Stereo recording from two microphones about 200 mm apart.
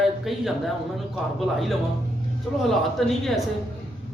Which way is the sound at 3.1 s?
Centre (ahead or behind).